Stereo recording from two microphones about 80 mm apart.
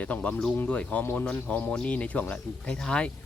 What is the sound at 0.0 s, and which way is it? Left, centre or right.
Speech, centre.